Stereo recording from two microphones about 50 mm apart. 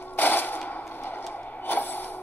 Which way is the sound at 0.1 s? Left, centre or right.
Left.